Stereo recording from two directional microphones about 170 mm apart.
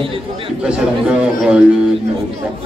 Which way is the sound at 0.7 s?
5° right (ahead or behind).